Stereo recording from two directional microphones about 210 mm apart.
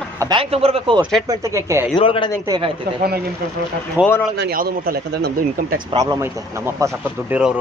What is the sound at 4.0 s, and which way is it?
Speech, 10° right (ahead or behind).